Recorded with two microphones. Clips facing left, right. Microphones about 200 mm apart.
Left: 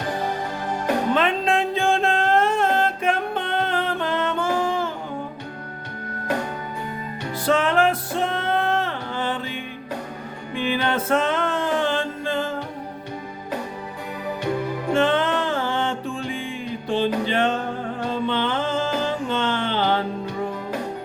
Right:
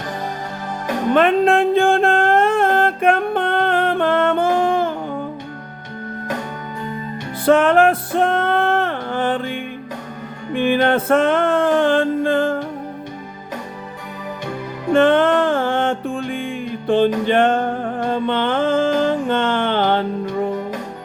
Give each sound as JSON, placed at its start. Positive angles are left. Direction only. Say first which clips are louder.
{"t": 1.1, "sound": "music", "louder": "right 11 dB", "side_deg": -55}
{"t": 7.4, "sound": "music", "louder": "right 7 dB", "side_deg": -55}
{"t": 14.9, "sound": "music", "louder": "right 7 dB", "side_deg": -55}